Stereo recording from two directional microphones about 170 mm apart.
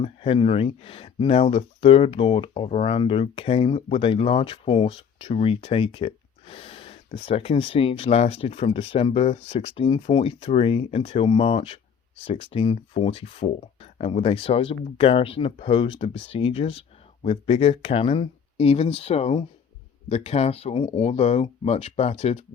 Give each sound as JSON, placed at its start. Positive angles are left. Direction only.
{"t": 0.0, "sound": "speech", "side_deg": 35}